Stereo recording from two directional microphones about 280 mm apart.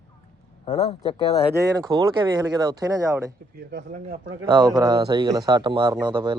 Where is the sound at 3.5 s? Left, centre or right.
Right.